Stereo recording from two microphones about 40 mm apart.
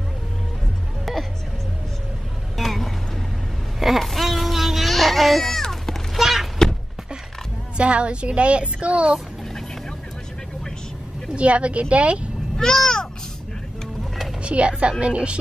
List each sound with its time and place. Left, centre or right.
1.1 s music: centre
2.5 s vehicle: centre
4.0 s baby cry: centre
6.1 s a sound: centre
7.7 s a woman's voice: right
11.3 s a woman's voice: right
12.5 s a sound: centre
14.4 s a woman's voice: right